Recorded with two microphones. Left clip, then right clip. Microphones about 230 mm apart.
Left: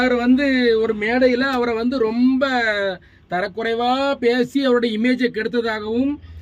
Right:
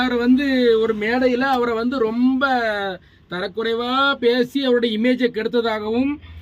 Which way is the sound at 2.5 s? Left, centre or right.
Right.